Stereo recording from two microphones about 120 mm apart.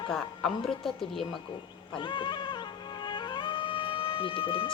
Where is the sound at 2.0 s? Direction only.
40° left (ahead or behind).